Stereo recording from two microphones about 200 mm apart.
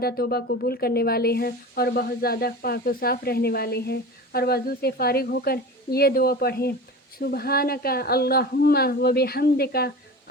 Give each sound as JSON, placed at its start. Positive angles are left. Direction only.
{"t": 0.0, "sound": "speech", "side_deg": 50}